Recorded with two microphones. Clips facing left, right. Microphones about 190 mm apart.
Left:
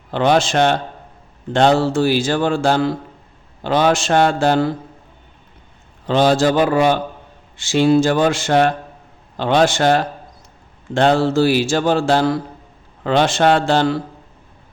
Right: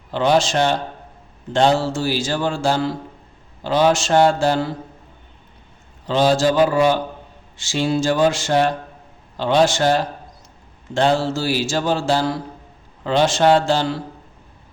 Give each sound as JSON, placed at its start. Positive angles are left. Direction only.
{"t": 0.1, "sound": "speech", "side_deg": 60}
{"t": 6.1, "sound": "speech", "side_deg": 60}